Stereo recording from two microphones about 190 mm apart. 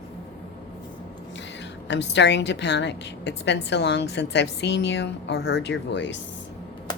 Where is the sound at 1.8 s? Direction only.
65° left (ahead or behind).